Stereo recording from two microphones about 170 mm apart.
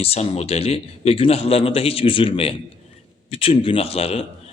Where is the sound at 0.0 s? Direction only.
40° left (ahead or behind).